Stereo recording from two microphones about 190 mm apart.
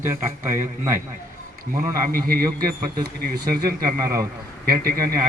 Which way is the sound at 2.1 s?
50° right (ahead or behind).